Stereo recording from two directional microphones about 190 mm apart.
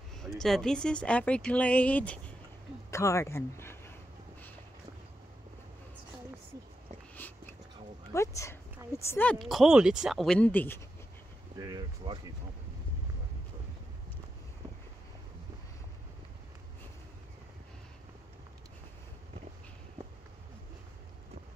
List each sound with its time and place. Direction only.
0.2 s speech: centre (ahead or behind)
7.2 s whispering: 10° left (ahead or behind)
8.1 s speech: 15° left (ahead or behind)
11.5 s a sound: 20° right (ahead or behind)